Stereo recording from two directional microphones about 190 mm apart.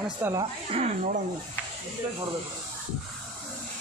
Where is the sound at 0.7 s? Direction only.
35° right (ahead or behind).